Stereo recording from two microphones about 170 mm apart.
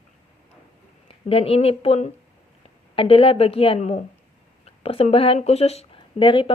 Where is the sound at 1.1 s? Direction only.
35° left (ahead or behind).